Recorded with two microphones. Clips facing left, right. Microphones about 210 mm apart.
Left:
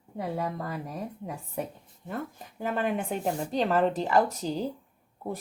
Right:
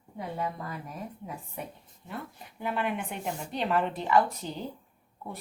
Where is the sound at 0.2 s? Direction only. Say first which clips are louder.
Left 3 dB; 40° left (ahead or behind).